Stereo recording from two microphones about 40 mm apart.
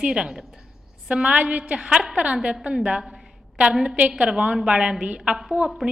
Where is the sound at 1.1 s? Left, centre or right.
Right.